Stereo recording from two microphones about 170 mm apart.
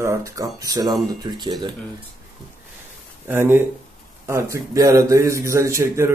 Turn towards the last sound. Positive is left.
turn(degrees=-15)  # may be behind; listen again after turning